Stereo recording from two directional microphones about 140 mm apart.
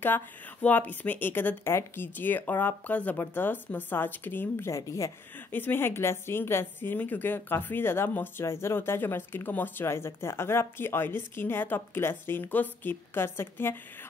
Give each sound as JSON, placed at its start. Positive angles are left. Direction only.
{"t": 0.0, "sound": "speech", "side_deg": 15}